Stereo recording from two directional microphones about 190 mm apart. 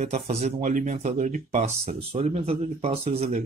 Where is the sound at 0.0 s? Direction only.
35° right (ahead or behind).